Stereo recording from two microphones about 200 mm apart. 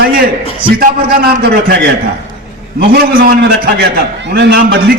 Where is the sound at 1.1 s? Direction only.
50° right (ahead or behind).